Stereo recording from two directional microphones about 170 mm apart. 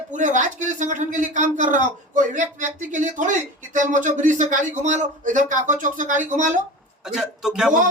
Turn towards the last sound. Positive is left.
turn(degrees=-5)  # may be behind; listen again after turning